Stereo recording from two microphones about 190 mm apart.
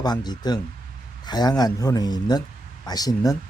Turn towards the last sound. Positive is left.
turn(degrees=20)  # may be behind; listen again after turning